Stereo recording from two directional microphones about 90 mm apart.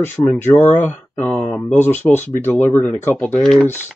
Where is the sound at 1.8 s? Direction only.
20° left (ahead or behind).